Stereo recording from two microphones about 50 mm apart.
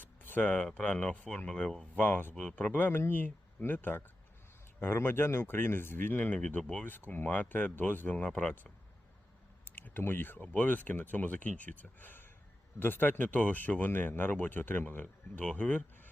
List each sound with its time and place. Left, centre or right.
0.0 s a sound: left
0.6 s speech: left
2.0 s speech: left
6.6 s speech: centre
6.8 s speech: left
8.3 s speech: centre
9.6 s a sound: left
10.0 s speech: left
10.5 s speech: left
15.4 s speech: left